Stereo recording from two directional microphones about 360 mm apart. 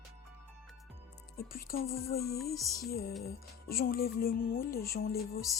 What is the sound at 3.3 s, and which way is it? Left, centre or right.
Speech, left.